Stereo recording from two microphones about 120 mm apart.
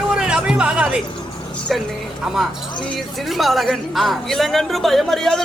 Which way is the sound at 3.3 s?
Centre (ahead or behind).